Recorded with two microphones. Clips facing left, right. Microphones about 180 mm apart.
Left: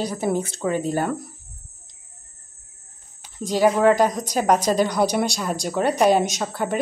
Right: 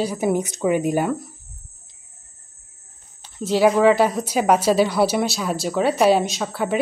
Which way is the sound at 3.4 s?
5° right (ahead or behind).